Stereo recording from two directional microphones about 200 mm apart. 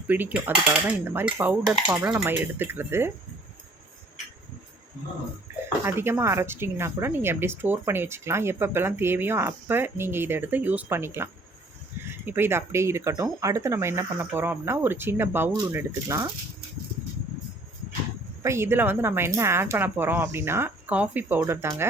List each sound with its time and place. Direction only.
0.1 s speech: 10° right (ahead or behind)
1.7 s speech: 20° right (ahead or behind)
5.6 s speech: 10° right (ahead or behind)
18.4 s speech: 15° right (ahead or behind)